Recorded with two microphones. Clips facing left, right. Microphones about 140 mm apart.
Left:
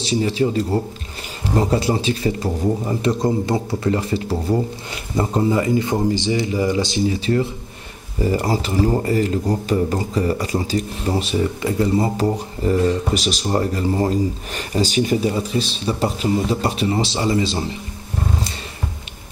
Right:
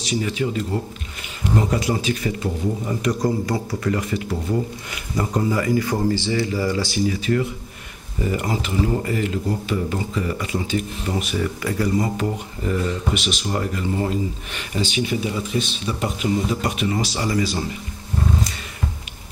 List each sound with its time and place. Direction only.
0.0 s speech: 30° left (ahead or behind)